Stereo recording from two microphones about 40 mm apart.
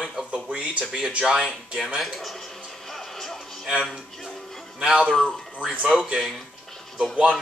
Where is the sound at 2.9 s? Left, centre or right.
Centre.